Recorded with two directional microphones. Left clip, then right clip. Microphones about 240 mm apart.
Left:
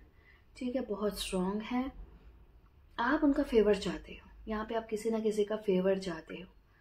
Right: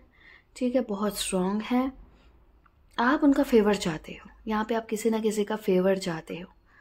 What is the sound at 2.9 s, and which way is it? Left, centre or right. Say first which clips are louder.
A woman's voice: right 7 dB; right.